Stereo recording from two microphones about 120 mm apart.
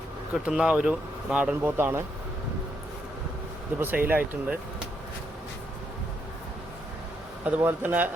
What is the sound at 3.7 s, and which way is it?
Speech, 15° right (ahead or behind).